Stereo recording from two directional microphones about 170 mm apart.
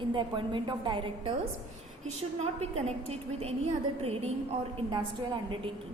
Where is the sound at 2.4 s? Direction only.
35° right (ahead or behind).